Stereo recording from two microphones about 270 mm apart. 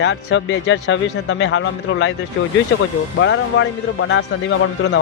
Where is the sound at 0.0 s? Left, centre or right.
Left.